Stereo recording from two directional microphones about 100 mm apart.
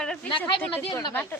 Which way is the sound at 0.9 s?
40° left (ahead or behind).